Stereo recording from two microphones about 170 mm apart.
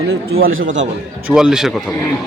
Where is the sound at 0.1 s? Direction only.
70° right (ahead or behind).